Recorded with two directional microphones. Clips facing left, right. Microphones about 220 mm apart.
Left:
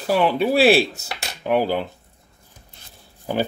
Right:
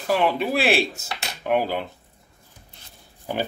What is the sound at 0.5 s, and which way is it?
Speech, 35° left (ahead or behind).